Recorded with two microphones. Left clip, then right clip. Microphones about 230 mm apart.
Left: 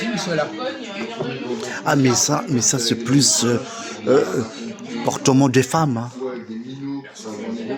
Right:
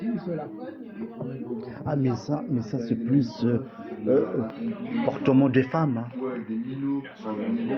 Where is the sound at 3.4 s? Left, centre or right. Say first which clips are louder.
Left 7 dB; left.